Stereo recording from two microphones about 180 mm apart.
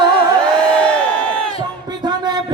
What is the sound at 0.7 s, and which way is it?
Crowd, 5° left (ahead or behind).